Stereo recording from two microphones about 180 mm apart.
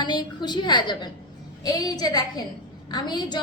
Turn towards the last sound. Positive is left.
turn(degrees=25)  # may be behind; listen again after turning